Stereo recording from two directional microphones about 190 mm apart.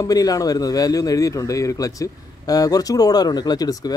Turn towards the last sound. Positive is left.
turn(degrees=20)  # may be behind; listen again after turning